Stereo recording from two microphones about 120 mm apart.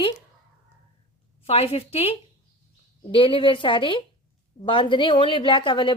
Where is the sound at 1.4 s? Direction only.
55° left (ahead or behind).